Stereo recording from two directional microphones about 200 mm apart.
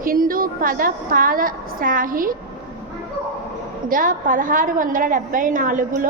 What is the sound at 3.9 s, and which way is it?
A woman's voice, 45° right (ahead or behind).